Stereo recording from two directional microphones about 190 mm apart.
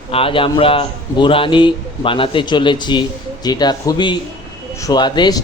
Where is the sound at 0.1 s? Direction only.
30° left (ahead or behind).